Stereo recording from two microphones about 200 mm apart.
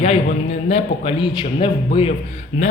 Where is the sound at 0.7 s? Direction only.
25° left (ahead or behind).